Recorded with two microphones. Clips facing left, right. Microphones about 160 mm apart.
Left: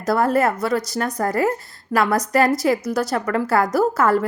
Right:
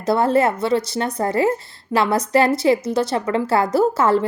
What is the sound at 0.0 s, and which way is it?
A woman's voice, 25° right (ahead or behind).